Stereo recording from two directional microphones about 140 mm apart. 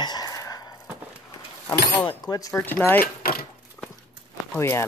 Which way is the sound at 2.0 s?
30° left (ahead or behind).